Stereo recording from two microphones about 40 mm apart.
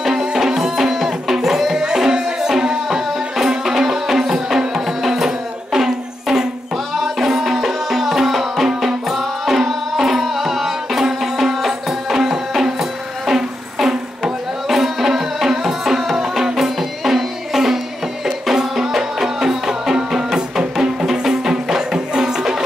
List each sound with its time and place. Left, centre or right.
0.0 s music: centre
1.8 s music: centre